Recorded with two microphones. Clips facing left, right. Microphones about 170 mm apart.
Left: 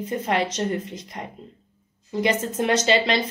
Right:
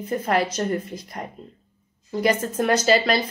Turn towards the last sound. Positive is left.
turn(degrees=25)  # may be behind; listen again after turning